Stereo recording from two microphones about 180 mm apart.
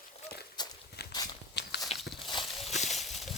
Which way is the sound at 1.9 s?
35° left (ahead or behind).